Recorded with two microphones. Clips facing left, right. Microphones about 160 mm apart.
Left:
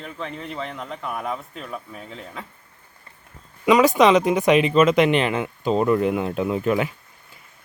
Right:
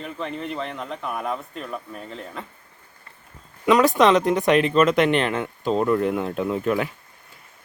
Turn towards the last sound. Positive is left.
turn(degrees=5)  # may be behind; listen again after turning